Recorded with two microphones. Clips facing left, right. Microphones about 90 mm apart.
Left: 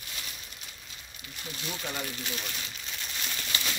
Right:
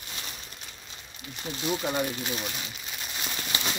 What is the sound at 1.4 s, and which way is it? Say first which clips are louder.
Speech: right 8 dB; 25° right (ahead or behind).